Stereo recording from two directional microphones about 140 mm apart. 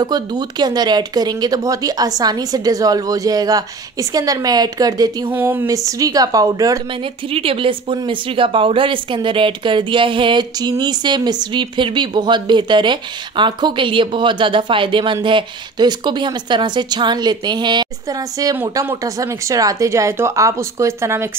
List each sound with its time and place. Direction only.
0.0 s speech: 30° right (ahead or behind)
5.3 s speech: 15° right (ahead or behind)
7.3 s a woman's voice: 40° right (ahead or behind); by 21.3 s 20° right (ahead or behind)